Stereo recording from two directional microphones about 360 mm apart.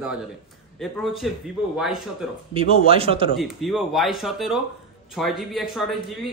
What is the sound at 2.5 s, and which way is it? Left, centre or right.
Speech, centre.